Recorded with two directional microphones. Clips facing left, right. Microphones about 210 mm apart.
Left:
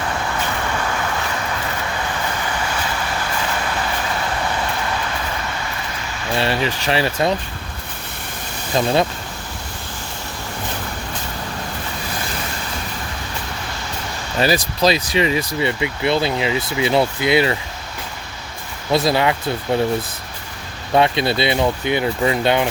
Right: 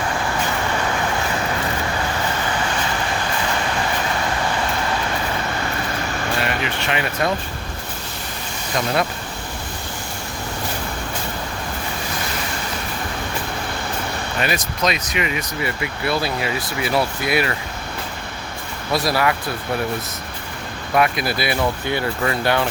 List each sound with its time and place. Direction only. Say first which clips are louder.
6.4 s speech: left 3 dB; 35° left (ahead or behind)
8.7 s speech: left 4 dB; 30° left (ahead or behind)
14.3 s speech: left 7 dB; 35° left (ahead or behind)
18.9 s speech: left 3 dB; 25° left (ahead or behind)
20.9 s speech: left 3 dB; 25° left (ahead or behind)